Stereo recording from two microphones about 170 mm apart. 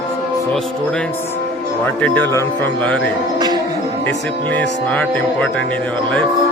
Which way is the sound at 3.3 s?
25° right (ahead or behind).